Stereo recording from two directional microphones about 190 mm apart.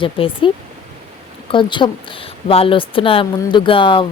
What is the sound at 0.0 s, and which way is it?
A woman's voice, 30° left (ahead or behind).